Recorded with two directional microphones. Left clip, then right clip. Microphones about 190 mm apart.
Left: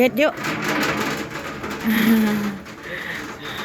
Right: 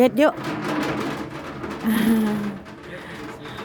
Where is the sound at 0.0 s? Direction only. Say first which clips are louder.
Even; 30° right (ahead or behind).